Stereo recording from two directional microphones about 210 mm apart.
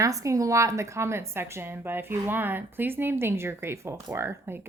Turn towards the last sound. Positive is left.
turn(degrees=-10)  # may be behind; listen again after turning